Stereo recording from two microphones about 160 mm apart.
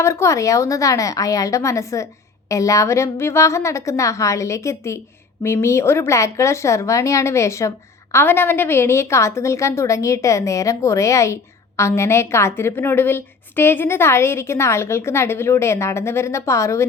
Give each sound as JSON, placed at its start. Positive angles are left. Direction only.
{"t": 0.0, "sound": "a woman's voice", "side_deg": 15}